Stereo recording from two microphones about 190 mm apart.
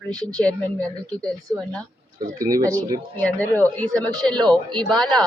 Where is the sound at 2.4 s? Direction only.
20° right (ahead or behind).